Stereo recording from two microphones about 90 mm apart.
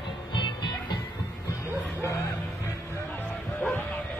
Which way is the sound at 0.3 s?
55° left (ahead or behind).